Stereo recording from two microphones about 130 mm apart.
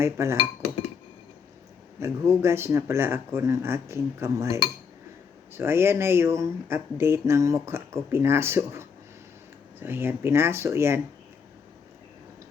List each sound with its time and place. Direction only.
0.0 s speech: 20° right (ahead or behind)
2.0 s speech: 20° right (ahead or behind)